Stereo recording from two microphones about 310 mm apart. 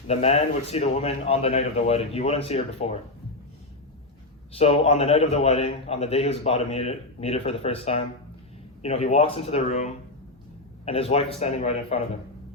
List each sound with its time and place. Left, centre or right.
0.1 s a man's voice: left
4.5 s a man's voice: centre